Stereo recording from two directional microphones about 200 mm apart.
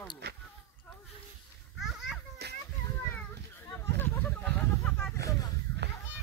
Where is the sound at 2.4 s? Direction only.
55° right (ahead or behind).